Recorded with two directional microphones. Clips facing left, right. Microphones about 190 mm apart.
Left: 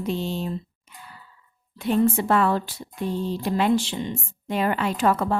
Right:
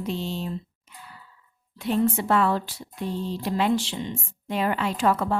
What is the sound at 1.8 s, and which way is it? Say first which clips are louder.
A woman's voice: left 3 dB; 50° left (ahead or behind).